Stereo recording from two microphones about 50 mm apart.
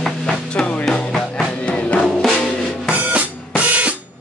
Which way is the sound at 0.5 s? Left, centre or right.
Left.